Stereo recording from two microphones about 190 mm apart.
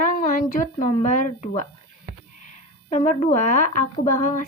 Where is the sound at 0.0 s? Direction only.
45° left (ahead or behind).